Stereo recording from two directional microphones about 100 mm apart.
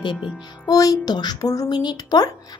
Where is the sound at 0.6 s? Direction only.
35° left (ahead or behind).